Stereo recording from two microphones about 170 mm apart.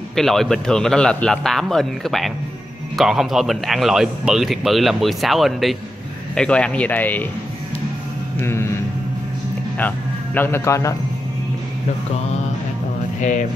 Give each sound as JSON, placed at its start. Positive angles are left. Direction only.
{"t": 0.1, "sound": "a man's voice", "side_deg": 0}
{"t": 8.4, "sound": "a sound", "side_deg": 15}
{"t": 9.8, "sound": "speech", "side_deg": 10}
{"t": 13.2, "sound": "music", "side_deg": 50}